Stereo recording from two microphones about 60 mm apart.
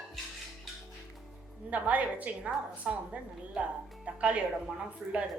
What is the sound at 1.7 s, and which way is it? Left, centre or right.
A woman's voice, right.